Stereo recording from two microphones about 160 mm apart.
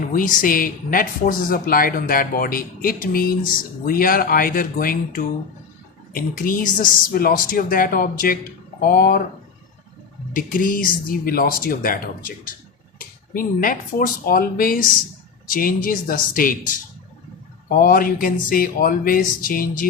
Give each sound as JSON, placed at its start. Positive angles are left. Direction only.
{"t": 0.1, "sound": "speech", "side_deg": 60}
{"t": 10.3, "sound": "speech", "side_deg": 60}